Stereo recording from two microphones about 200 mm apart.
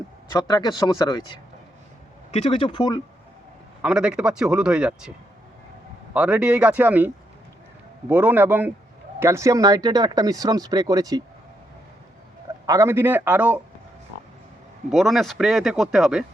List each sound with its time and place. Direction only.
0.3 s speech: 20° left (ahead or behind)
2.3 s speech: 30° left (ahead or behind)
3.8 s speech: 5° right (ahead or behind)
6.1 s speech: 5° right (ahead or behind)
8.1 s speech: 10° right (ahead or behind)
12.6 s speech: 15° right (ahead or behind)
14.8 s speech: centre (ahead or behind)